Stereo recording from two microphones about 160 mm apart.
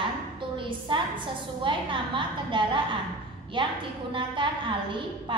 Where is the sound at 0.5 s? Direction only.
30° right (ahead or behind).